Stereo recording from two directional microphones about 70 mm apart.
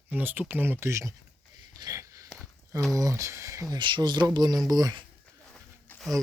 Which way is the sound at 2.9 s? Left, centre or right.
Right.